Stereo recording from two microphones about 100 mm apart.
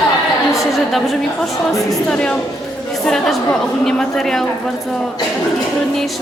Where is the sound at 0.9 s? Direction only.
Centre (ahead or behind).